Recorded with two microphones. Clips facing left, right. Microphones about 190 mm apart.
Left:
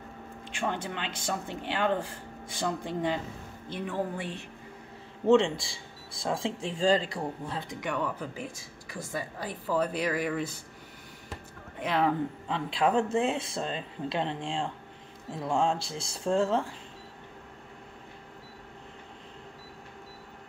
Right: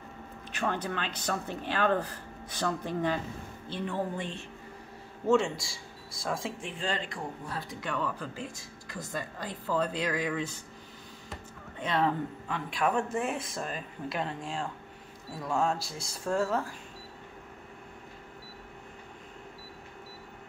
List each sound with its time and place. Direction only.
0.6 s speech: 20° left (ahead or behind)
5.2 s a man's voice: 30° left (ahead or behind); by 10.5 s 10° left (ahead or behind)
11.8 s speech: 10° left (ahead or behind)
12.4 s speech: 25° left (ahead or behind)